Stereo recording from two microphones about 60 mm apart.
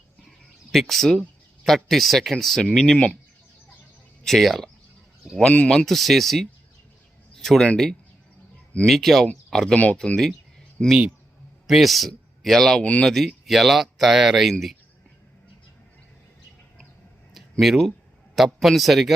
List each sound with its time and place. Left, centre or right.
0.3 s a sound: centre
1.6 s speech: centre
4.2 s speech: centre
5.4 s speech: centre
8.9 s speech: centre
9.7 s speech: left
10.8 s speech: centre
11.7 s speech: centre
12.8 s speech: centre
13.1 s speech: centre
17.6 s speech: centre